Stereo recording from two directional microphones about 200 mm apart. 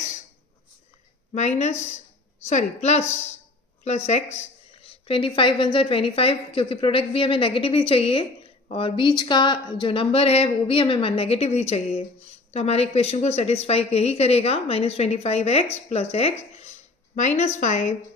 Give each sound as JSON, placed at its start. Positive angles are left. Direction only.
{"t": 1.3, "sound": "a woman's voice", "side_deg": 35}